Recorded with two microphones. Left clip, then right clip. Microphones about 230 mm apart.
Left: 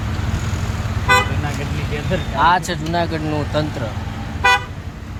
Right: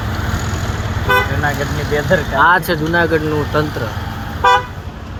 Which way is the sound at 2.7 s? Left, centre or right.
Centre.